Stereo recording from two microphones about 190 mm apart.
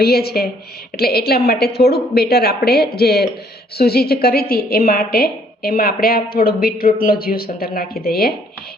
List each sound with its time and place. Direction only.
0.0 s a woman's voice: 55° left (ahead or behind)